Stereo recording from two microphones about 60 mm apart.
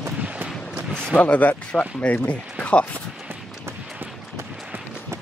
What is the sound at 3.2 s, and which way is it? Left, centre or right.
Run, right.